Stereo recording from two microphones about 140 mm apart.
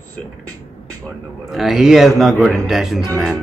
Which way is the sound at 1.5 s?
Centre (ahead or behind).